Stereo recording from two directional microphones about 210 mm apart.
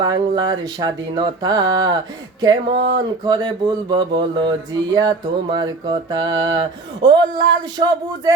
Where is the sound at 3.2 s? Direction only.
20° right (ahead or behind).